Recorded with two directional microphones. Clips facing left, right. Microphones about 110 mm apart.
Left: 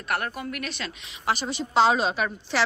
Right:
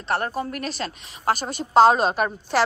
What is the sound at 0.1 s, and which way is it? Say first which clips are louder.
A woman's voice: right 4 dB; 30° right (ahead or behind).